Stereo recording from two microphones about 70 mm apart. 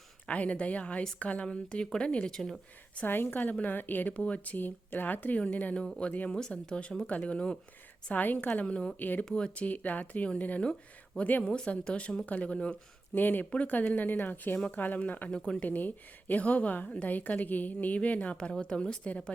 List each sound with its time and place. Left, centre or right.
0.3 s a woman's voice: centre
3.1 s a woman's voice: left
4.1 s a woman's voice: centre
11.4 s speech: centre
13.1 s a woman's voice: left